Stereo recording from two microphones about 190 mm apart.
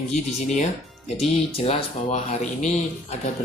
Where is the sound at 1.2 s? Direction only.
30° left (ahead or behind).